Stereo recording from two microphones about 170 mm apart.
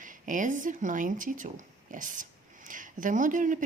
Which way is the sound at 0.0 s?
50° right (ahead or behind).